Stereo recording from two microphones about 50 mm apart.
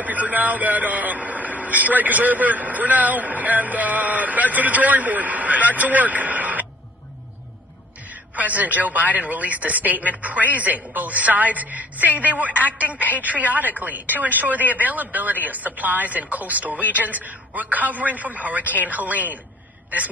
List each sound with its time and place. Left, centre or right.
0.0 s a man's voice: right
8.4 s a man's voice: right